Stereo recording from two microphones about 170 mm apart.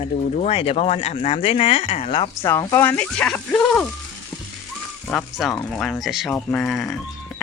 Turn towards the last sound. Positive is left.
turn(degrees=0)  # may be behind; listen again after turning